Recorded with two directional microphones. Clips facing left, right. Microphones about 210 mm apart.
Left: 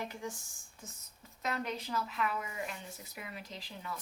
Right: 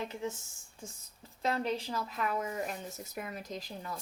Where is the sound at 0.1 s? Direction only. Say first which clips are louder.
Right 4 dB; 25° right (ahead or behind).